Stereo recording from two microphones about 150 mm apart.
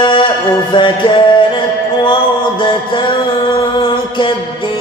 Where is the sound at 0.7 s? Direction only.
30° left (ahead or behind).